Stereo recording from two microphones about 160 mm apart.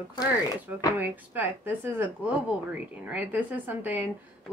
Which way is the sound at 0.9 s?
10° right (ahead or behind).